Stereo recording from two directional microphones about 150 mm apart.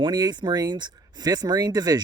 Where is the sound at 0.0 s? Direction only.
30° right (ahead or behind).